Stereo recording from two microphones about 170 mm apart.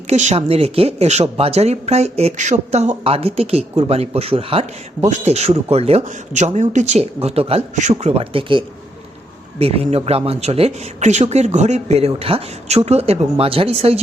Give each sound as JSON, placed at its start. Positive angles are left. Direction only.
{"t": 0.1, "sound": "speech", "side_deg": -40}